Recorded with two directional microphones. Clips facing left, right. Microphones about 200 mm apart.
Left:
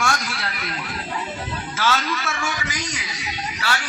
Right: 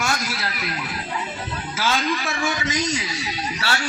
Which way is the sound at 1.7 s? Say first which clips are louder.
Even; 15° right (ahead or behind).